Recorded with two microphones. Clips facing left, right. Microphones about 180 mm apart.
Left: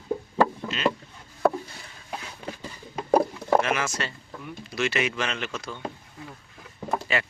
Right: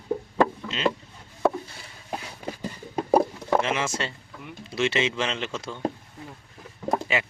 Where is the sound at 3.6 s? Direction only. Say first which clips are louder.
Even; 25° right (ahead or behind).